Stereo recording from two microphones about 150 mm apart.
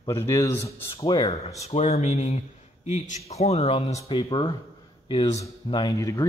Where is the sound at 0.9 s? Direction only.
35° left (ahead or behind).